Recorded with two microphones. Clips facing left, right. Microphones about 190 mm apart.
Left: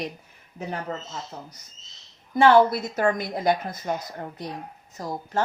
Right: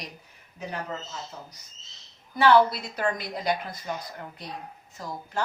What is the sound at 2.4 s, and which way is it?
A woman's voice, 50° left (ahead or behind).